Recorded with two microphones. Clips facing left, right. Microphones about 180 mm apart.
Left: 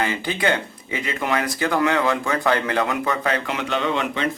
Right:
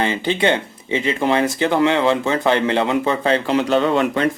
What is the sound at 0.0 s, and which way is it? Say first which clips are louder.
Speech: right 4 dB; 25° right (ahead or behind).